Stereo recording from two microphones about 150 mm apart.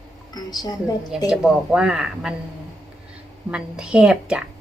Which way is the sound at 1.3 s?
5° right (ahead or behind).